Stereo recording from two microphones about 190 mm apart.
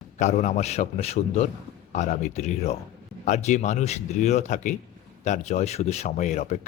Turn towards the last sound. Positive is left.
turn(degrees=35)  # may be behind; listen again after turning